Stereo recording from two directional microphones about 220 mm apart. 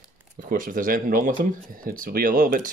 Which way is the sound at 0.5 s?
40° right (ahead or behind).